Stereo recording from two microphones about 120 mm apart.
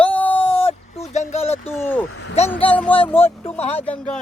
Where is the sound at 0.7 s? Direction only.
65° left (ahead or behind).